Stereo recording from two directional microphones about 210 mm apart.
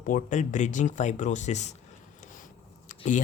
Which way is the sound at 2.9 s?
35° left (ahead or behind).